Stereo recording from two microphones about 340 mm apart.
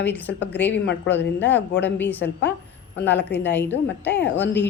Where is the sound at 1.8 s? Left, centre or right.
Centre.